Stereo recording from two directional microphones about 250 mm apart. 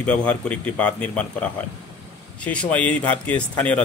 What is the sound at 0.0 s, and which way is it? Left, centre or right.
Speech, centre.